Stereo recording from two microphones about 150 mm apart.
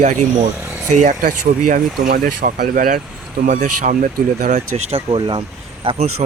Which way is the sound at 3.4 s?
55° right (ahead or behind).